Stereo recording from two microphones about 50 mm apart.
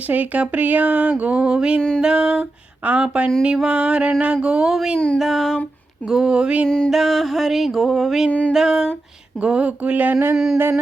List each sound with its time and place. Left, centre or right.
0.1 s speech: right
2.0 s a sound: centre
2.8 s speech: right
4.9 s music: centre
5.2 s music: centre
6.1 s a sound: centre
6.7 s music: centre
6.9 s music: centre
8.3 s music: left
8.5 s a sound: centre
9.4 s speech: right
10.3 s a sound: centre